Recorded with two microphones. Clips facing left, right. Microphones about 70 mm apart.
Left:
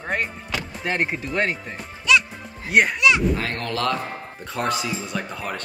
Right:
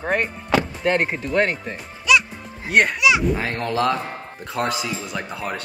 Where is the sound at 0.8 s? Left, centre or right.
Centre.